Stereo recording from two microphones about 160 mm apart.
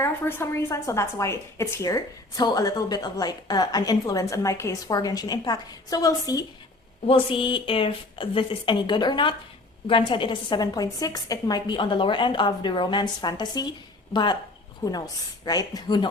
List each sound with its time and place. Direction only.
0.0 s a woman's voice: 15° left (ahead or behind)
7.1 s a woman's voice: 35° left (ahead or behind)